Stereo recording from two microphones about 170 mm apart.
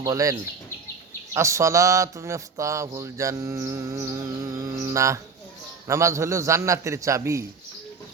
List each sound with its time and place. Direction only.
0.0 s a man's voice: 20° right (ahead or behind)